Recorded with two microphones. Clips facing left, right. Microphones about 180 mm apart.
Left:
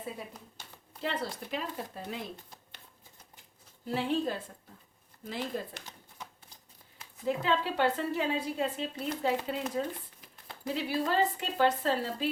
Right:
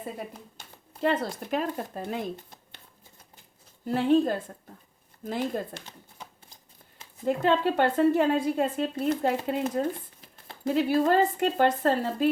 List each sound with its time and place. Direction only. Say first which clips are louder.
1.0 s speech: right 8 dB; 50° right (ahead or behind)
3.8 s speech: right 8 dB; 50° right (ahead or behind)
7.3 s speech: right 6 dB; 50° right (ahead or behind)
10.7 s speech: right 8 dB; 50° right (ahead or behind)